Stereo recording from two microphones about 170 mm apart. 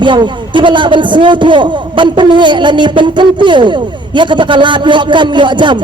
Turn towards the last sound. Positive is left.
turn(degrees=-25)  # may be behind; listen again after turning